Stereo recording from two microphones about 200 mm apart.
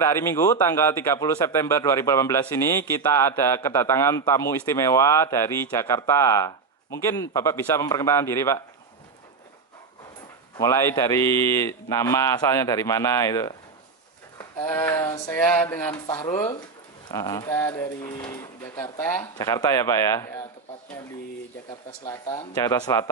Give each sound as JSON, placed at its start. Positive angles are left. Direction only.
{"t": 0.0, "sound": "a man's voice", "side_deg": 15}
{"t": 10.6, "sound": "a man's voice", "side_deg": 15}
{"t": 22.0, "sound": "a man's voice", "side_deg": 15}